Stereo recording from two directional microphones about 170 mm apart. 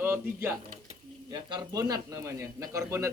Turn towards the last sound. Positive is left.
turn(degrees=-15)  # may be behind; listen again after turning